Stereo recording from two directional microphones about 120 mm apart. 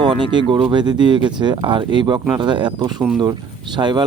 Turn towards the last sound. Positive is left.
turn(degrees=-40)  # may be behind; listen again after turning